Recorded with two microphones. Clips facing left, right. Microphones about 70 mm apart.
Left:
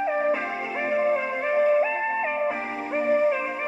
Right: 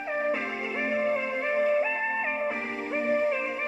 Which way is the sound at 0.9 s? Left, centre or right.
Centre.